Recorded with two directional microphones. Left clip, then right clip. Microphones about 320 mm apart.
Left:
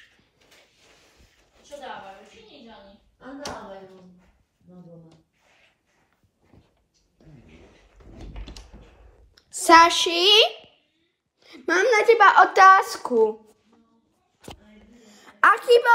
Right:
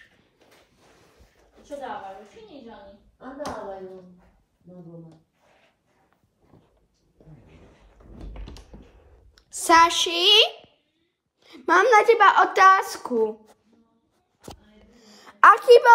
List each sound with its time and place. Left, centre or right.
8.8 s clicking: centre
9.6 s child singing: centre
11.4 s a sound: centre
11.7 s speech: right
12.1 s a woman's voice: centre
14.9 s a sound: centre